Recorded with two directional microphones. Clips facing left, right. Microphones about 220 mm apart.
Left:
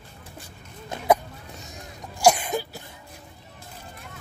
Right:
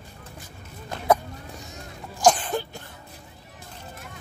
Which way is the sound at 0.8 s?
15° left (ahead or behind).